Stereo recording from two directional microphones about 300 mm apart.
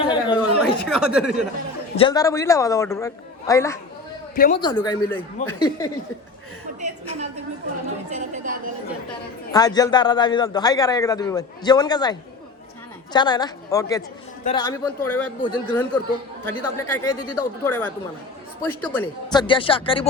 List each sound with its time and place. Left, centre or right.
0.0 s a sound: centre
0.6 s speech: centre
2.0 s a man's voice: centre
4.4 s speech: left
4.6 s a man's voice: centre
6.8 s a woman's voice: right
9.5 s a man's voice: centre
13.1 s a man's voice: centre